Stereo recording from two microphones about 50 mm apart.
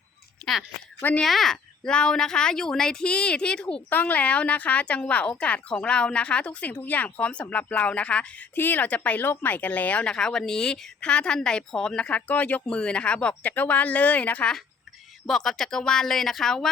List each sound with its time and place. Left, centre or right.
0.4 s a sound: centre
1.2 s speech: centre
1.8 s speech: centre
3.8 s speech: left
8.5 s speech: left
10.1 s speech: centre
12.3 s speech: left
12.6 s speech: left
15.3 s speech: centre